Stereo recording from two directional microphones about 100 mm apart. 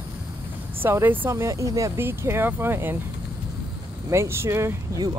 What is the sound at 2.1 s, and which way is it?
Speech, 25° right (ahead or behind).